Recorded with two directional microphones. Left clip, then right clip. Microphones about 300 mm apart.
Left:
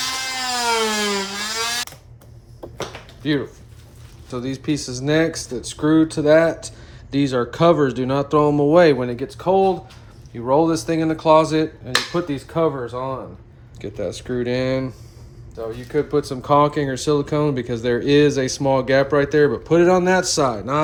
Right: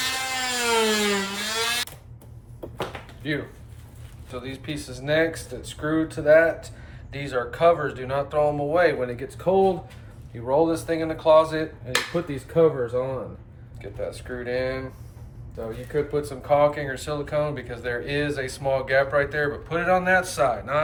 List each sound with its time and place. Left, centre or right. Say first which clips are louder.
0.0 s a sound: left 2 dB; centre
4.3 s speech: left 9 dB; centre
15.9 s speech: left 5 dB; left